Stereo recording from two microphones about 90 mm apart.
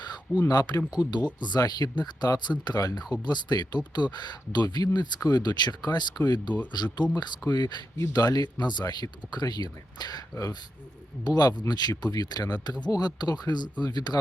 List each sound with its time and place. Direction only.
0.4 s speech: 45° left (ahead or behind)